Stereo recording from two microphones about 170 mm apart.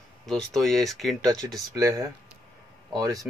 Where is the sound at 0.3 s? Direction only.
Centre (ahead or behind).